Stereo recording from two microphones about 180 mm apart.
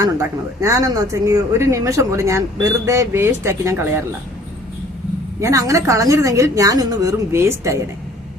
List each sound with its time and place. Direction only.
0.0 s speech: 15° right (ahead or behind)
5.4 s speech: 15° right (ahead or behind)